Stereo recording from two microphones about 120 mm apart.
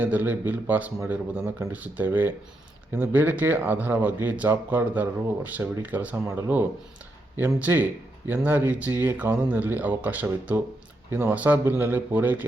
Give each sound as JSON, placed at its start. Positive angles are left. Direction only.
{"t": 0.0, "sound": "speech", "side_deg": -15}